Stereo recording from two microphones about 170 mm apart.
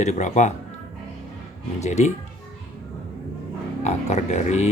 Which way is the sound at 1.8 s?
40° left (ahead or behind).